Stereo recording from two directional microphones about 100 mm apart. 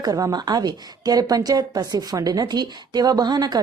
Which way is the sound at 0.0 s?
40° right (ahead or behind).